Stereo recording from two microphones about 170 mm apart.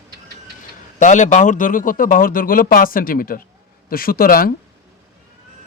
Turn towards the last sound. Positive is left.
turn(degrees=60)  # may be behind; listen again after turning